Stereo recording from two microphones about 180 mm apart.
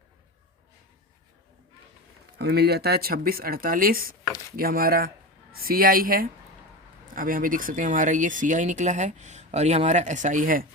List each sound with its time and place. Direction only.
2.4 s speech: 65° right (ahead or behind)